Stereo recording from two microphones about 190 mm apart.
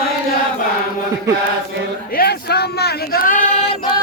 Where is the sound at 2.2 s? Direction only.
55° left (ahead or behind).